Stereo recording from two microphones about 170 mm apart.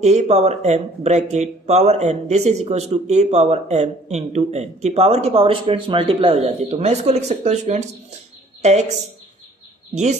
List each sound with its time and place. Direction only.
0.0 s speech: 40° right (ahead or behind)